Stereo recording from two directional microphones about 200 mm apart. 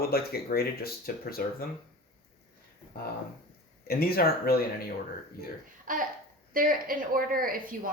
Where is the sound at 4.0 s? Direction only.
50° left (ahead or behind).